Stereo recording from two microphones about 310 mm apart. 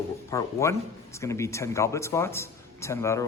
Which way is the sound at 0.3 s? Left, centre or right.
Centre.